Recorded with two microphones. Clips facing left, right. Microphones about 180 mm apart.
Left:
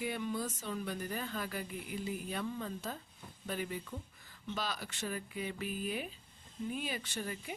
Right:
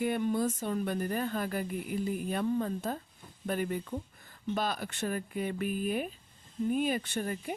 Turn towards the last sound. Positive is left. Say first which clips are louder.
# right 7 dB
turn(degrees=-50)  # may be behind; listen again after turning